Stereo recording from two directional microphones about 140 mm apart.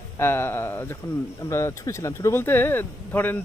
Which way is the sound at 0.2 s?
15° left (ahead or behind).